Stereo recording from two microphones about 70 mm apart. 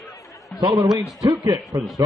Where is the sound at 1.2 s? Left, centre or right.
Right.